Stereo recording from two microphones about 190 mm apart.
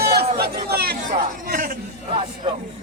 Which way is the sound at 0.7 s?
55° right (ahead or behind).